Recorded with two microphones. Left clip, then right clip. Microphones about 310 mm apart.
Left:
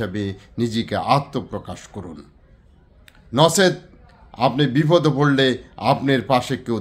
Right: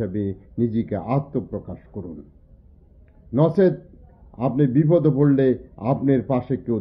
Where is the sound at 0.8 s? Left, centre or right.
Centre.